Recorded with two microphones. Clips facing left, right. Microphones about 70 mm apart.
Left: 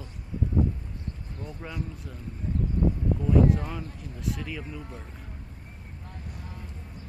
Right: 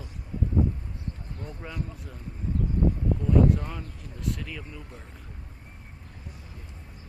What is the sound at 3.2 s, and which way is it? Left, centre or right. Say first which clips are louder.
Speech: even; centre.